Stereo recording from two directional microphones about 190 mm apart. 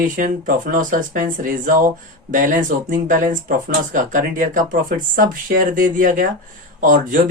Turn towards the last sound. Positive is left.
turn(degrees=-45)  # may be behind; listen again after turning